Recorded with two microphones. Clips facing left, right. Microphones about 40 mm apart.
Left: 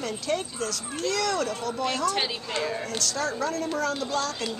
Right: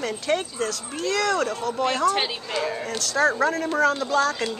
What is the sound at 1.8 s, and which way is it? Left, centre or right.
Speech, centre.